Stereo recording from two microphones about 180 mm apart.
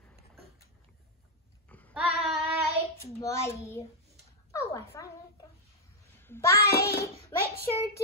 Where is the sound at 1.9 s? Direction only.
5° right (ahead or behind).